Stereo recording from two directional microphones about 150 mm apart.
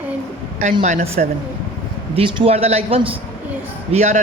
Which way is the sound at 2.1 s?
35° right (ahead or behind).